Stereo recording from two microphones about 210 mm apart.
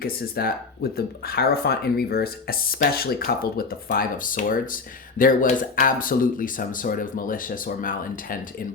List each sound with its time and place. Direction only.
0.0 s speech: 45° left (ahead or behind)